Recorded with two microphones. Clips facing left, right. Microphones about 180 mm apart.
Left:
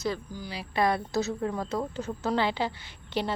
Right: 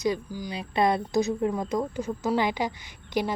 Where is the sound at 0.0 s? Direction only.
15° right (ahead or behind).